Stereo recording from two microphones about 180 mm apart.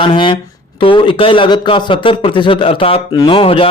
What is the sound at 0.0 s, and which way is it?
A man's voice, 30° left (ahead or behind).